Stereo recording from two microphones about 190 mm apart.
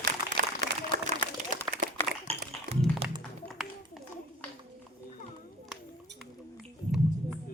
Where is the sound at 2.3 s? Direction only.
30° right (ahead or behind).